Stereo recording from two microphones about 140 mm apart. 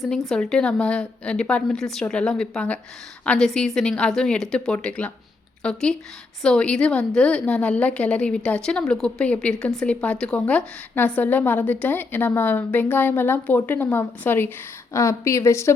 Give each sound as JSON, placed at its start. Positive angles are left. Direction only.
{"t": 0.3, "sound": "a woman's voice", "side_deg": 5}